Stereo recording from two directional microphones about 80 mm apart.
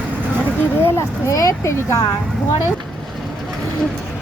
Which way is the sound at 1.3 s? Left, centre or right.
Left.